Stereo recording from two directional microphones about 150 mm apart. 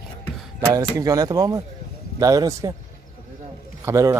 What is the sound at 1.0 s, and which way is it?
Speech, 25° right (ahead or behind).